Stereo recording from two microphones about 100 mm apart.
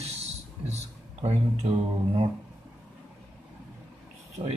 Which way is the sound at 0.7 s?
90° right.